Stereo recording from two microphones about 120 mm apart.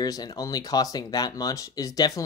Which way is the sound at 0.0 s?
35° left (ahead or behind).